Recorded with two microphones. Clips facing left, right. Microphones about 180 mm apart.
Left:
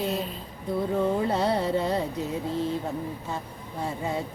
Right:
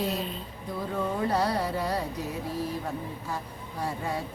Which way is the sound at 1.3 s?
25° left (ahead or behind).